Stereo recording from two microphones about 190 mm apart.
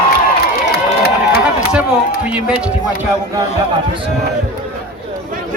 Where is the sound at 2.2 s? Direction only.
5° right (ahead or behind).